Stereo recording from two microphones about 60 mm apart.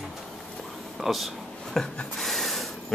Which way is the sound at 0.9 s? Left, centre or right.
Centre.